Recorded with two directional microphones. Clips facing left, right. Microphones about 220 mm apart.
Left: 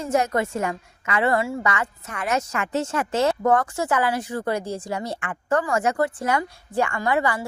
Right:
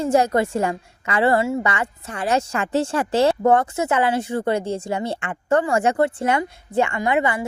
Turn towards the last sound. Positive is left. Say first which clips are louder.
# right 2 dB
turn(degrees=-20)  # may be behind; listen again after turning